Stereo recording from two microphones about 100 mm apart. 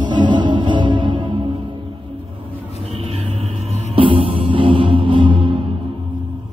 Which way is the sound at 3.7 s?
75° right (ahead or behind).